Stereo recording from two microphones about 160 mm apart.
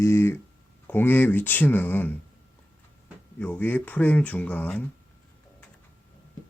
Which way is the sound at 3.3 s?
10° left (ahead or behind).